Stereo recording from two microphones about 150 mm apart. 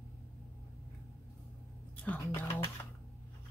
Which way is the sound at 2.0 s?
10° left (ahead or behind).